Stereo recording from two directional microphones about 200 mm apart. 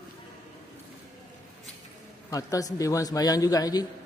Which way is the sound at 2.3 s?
15° left (ahead or behind).